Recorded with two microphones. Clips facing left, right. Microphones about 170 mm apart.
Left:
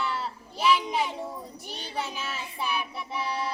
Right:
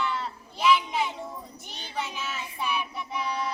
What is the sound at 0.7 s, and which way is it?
Speech, 35° left (ahead or behind).